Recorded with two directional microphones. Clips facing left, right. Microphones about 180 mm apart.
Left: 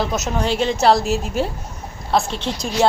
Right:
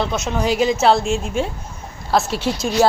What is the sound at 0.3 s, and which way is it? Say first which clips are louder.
A woman's voice: right 4 dB; 10° right (ahead or behind).